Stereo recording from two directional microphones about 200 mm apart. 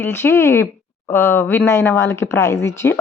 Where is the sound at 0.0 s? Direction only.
10° left (ahead or behind).